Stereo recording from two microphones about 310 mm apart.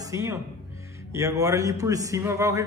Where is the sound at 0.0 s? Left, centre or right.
Centre.